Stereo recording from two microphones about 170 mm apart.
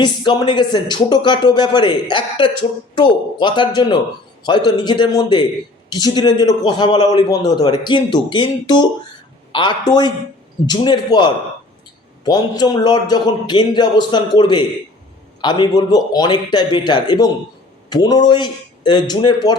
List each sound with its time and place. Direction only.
0.0 s a man's voice: 25° left (ahead or behind)